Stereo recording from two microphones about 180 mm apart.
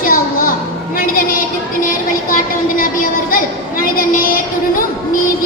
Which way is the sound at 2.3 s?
50° left (ahead or behind).